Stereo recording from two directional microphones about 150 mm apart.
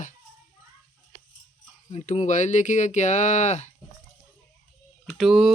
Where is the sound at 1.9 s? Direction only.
50° left (ahead or behind).